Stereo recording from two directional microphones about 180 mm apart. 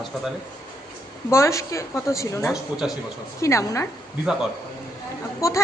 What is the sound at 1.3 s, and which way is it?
A woman's voice, 15° left (ahead or behind).